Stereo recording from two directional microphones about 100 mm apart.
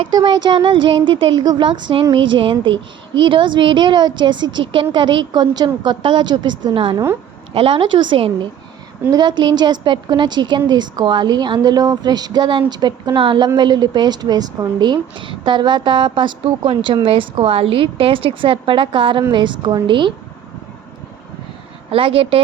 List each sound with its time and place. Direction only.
0.3 s a woman's voice: 55° right (ahead or behind)
7.5 s a woman's voice: 65° right (ahead or behind)
21.8 s a woman's voice: 65° right (ahead or behind)